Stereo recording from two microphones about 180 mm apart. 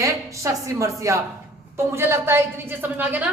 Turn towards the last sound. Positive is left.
turn(degrees=-10)  # may be behind; listen again after turning